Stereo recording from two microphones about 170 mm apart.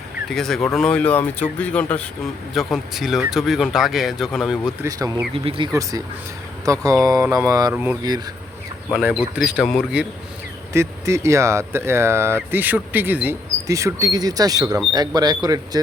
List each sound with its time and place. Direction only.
0.3 s speech: 5° left (ahead or behind)
4.8 s speech: 20° right (ahead or behind)
5.3 s speech: 35° right (ahead or behind)
6.7 s speech: 20° right (ahead or behind)
7.7 s speech: 10° right (ahead or behind)
10.7 s speech: 15° right (ahead or behind)